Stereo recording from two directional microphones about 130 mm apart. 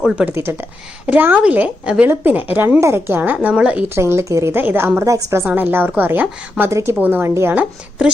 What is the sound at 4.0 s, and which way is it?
A woman's voice, 20° right (ahead or behind).